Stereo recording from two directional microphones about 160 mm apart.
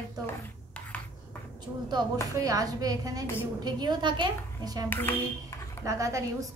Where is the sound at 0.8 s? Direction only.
10° left (ahead or behind).